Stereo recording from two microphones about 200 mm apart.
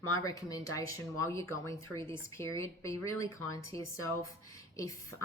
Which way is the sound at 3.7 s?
25° right (ahead or behind).